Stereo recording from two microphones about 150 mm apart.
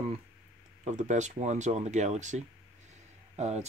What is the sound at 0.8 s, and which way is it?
Speech, 55° right (ahead or behind).